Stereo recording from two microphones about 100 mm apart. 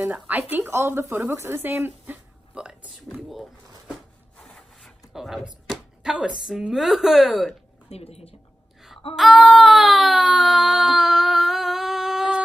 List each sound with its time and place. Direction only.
0.1 s speech: 15° right (ahead or behind)
2.5 s speech: 10° right (ahead or behind)
3.3 s a sound: centre (ahead or behind)
5.1 s speech: centre (ahead or behind)
7.9 s a woman's voice: 90° left
9.1 s baby cry: centre (ahead or behind)